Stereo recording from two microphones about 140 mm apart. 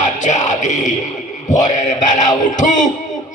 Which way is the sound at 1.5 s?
60° left (ahead or behind).